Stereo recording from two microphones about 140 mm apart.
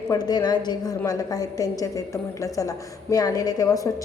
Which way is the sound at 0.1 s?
30° left (ahead or behind).